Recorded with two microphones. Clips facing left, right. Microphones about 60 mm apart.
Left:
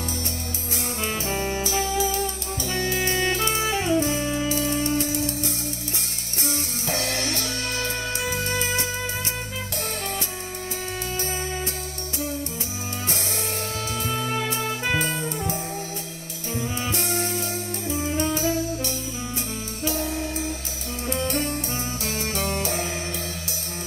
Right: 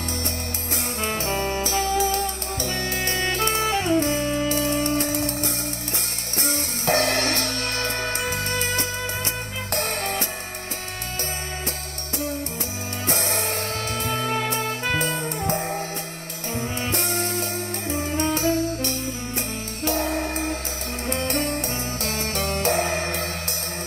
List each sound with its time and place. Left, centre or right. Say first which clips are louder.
1.0 s brass instrument: right 2 dB; right
1.6 s music: right 2 dB; right
14.0 s music: right 2 dB; right